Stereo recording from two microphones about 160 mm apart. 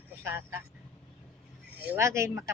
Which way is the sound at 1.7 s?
15° right (ahead or behind).